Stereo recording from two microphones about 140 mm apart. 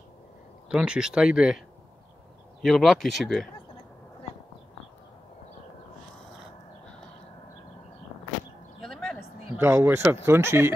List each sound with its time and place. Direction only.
0.7 s speech: 5° right (ahead or behind)
2.6 s speech: centre (ahead or behind)
8.8 s a sound: centre (ahead or behind)
9.6 s speech: 15° right (ahead or behind)